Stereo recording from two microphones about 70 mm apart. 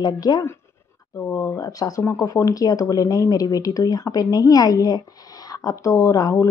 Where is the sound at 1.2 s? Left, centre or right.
Left.